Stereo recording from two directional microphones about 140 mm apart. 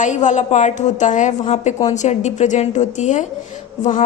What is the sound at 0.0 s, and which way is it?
A woman's voice, 60° left (ahead or behind).